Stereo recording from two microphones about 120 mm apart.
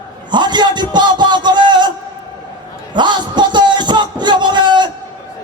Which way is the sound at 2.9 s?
40° right (ahead or behind).